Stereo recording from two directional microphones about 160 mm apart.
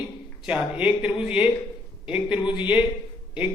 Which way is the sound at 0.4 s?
10° right (ahead or behind).